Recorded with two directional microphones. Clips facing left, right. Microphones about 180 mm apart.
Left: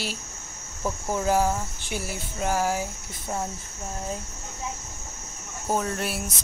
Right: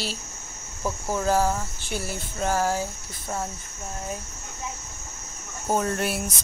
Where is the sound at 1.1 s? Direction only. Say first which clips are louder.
Even; 15° left (ahead or behind).